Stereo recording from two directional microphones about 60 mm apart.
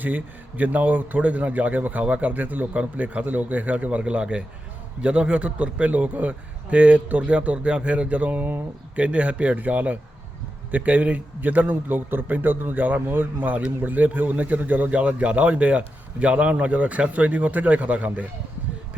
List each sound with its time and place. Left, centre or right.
0.0 s a man's voice: right